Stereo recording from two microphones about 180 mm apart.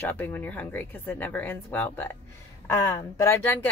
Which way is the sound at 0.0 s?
10° left (ahead or behind).